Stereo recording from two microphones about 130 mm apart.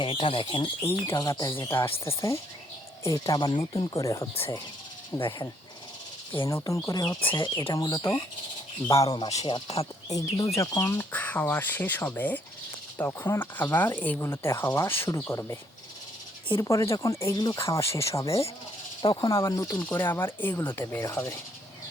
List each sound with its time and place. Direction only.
0.0 s speech: 45° left (ahead or behind)
0.9 s speech: 25° left (ahead or behind); by 3.8 s 40° left (ahead or behind)
3.9 s speech: 25° left (ahead or behind)
5.1 s speech: 30° left (ahead or behind)
6.5 s speech: 25° left (ahead or behind)
9.5 s speech: 50° left (ahead or behind)
10.1 s speech: 30° left (ahead or behind)
16.6 s speech: 25° left (ahead or behind)
17.3 s speech: 30° left (ahead or behind)
17.6 s speech: 20° left (ahead or behind)